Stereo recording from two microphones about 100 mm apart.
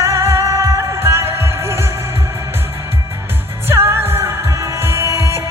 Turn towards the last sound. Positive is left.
turn(degrees=-30)  # may be behind; listen again after turning